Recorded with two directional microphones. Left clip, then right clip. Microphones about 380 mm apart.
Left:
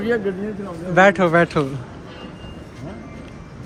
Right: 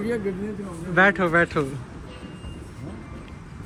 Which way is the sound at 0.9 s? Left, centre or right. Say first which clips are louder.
Left 5 dB; centre.